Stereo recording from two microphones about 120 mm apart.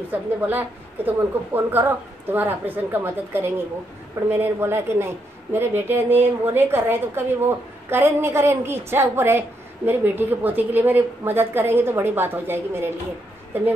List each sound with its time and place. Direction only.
0.1 s a woman's voice: 15° right (ahead or behind)